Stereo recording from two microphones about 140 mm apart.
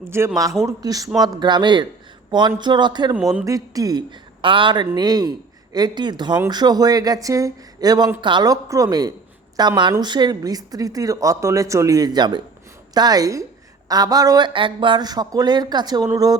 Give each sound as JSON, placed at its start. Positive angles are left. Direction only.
{"t": 0.0, "sound": "a woman's voice", "side_deg": -20}
{"t": 3.2, "sound": "speech", "side_deg": -5}
{"t": 3.4, "sound": "a woman's voice", "side_deg": -25}